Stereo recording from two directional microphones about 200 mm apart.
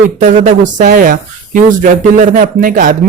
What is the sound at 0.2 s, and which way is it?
Speech, 35° right (ahead or behind).